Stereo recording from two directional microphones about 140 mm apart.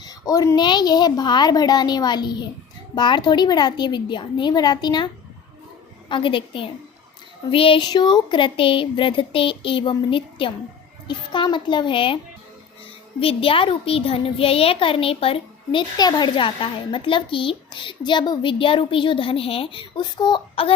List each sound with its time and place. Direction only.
0.0 s a woman's voice: 25° left (ahead or behind); by 15.8 s 40° left (ahead or behind)
16.0 s speech: 30° left (ahead or behind)